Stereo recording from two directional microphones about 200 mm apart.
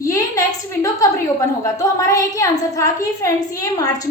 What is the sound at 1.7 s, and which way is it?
A woman's voice, 15° left (ahead or behind).